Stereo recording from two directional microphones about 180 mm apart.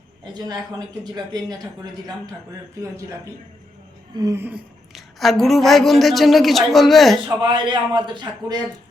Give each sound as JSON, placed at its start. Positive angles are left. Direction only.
{"t": 0.3, "sound": "speech", "side_deg": -20}
{"t": 4.2, "sound": "a sound", "side_deg": -15}
{"t": 7.3, "sound": "speech", "side_deg": -25}